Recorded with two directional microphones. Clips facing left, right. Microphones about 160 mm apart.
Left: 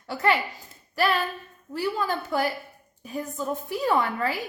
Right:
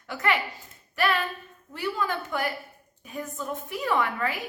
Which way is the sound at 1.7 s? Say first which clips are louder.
Left 2 dB; 35° left (ahead or behind).